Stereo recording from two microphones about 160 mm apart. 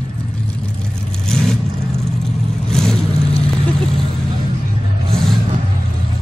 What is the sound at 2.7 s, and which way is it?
Vehicle, 5° left (ahead or behind).